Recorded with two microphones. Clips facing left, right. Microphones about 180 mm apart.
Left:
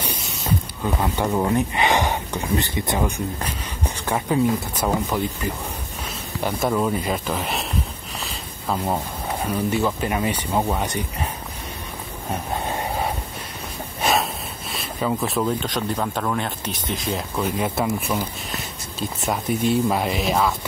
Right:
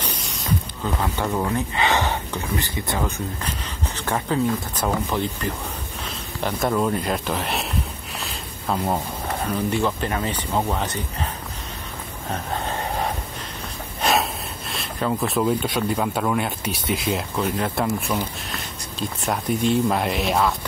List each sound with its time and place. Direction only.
0.8 s speech: 15° left (ahead or behind)
8.2 s a sound: centre (ahead or behind)
9.4 s speech: 5° left (ahead or behind)
12.3 s vehicle: 10° left (ahead or behind)
14.7 s speech: centre (ahead or behind)